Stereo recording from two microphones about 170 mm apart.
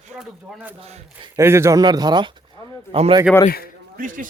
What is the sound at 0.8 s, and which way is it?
Speech, 35° right (ahead or behind).